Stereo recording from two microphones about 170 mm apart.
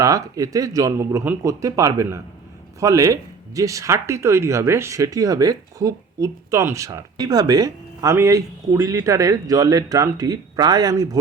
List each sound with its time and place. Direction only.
0.0 s speech: 20° right (ahead or behind)